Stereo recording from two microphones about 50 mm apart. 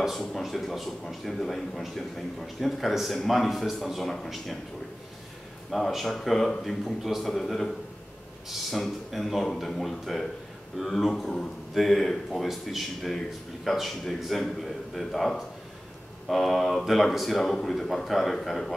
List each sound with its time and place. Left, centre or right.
0.0 s a man's voice: centre
5.9 s a man's voice: centre